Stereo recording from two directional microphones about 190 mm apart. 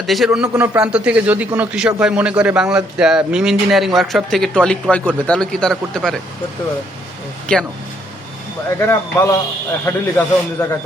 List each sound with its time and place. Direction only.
0.0 s a man's voice: centre (ahead or behind)
7.5 s speech: 5° left (ahead or behind)
8.9 s a man's voice: 15° left (ahead or behind)